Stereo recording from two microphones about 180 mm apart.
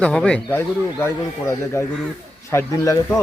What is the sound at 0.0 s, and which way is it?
Speech, 5° left (ahead or behind).